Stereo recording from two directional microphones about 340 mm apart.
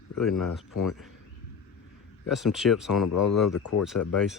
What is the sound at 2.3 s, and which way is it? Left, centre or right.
Speech, centre.